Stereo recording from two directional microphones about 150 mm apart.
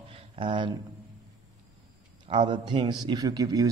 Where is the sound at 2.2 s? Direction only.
35° right (ahead or behind).